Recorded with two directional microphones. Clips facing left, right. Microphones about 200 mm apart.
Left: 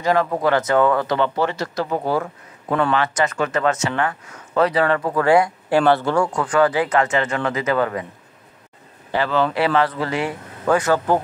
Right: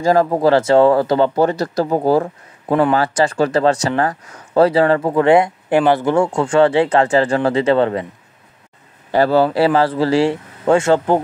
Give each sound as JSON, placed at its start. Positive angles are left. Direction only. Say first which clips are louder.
{"t": 0.0, "sound": "speech", "louder": "right 5 dB", "side_deg": -35}
{"t": 9.1, "sound": "speech", "louder": "right 6 dB", "side_deg": -40}